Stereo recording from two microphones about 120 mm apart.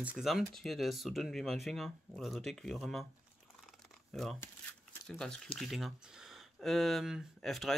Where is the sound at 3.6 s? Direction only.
Centre (ahead or behind).